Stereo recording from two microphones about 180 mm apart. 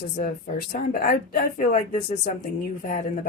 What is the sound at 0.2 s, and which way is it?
Speech, 50° left (ahead or behind).